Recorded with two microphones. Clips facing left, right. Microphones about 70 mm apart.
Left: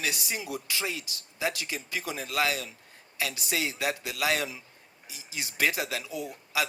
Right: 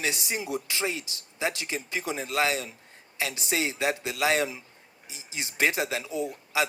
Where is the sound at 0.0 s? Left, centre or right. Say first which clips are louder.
Right 2 dB; right.